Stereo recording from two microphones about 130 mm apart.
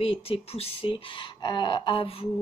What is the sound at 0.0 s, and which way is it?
Speech, 50° left (ahead or behind).